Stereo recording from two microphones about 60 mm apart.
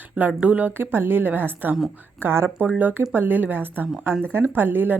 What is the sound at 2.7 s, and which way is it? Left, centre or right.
A woman's voice, right.